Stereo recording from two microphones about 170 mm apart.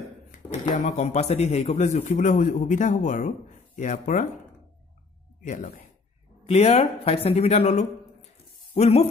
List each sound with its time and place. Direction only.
0.8 s a man's voice: 40° left (ahead or behind)
5.4 s speech: 50° left (ahead or behind)
6.4 s speech: 40° left (ahead or behind)